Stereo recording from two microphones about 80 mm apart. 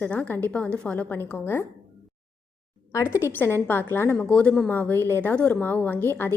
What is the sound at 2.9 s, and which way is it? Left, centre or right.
A woman's voice, left.